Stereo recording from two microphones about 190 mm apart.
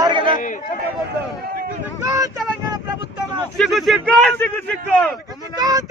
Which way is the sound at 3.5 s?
Centre (ahead or behind).